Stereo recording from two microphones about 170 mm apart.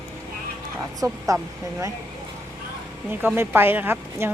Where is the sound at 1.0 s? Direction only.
20° right (ahead or behind).